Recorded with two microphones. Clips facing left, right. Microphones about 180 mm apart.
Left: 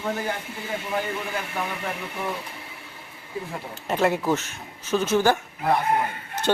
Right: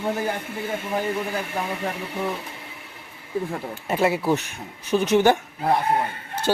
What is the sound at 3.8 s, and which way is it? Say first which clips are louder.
Speech: right 1 dB; 5° right (ahead or behind).